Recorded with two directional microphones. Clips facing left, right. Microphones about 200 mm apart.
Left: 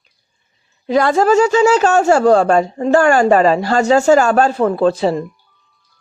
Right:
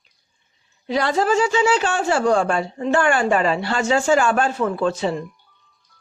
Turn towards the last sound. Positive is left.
turn(degrees=35)  # may be behind; listen again after turning